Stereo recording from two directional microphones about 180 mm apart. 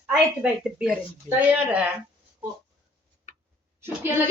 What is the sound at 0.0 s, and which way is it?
A woman's voice, 5° right (ahead or behind).